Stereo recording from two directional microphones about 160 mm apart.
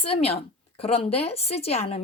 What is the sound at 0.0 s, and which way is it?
Speech, 35° left (ahead or behind).